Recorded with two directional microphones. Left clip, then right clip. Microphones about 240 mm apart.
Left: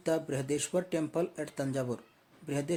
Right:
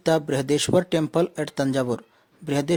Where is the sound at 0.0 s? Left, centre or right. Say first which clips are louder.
Right 10 dB; right.